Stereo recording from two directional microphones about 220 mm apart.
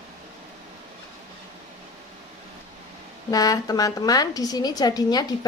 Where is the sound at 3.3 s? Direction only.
15° left (ahead or behind).